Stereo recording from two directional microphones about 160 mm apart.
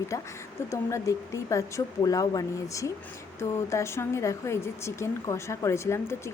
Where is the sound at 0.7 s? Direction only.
20° left (ahead or behind).